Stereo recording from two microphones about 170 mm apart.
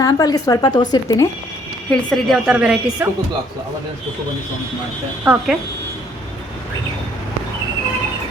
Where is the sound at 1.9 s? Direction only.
Centre (ahead or behind).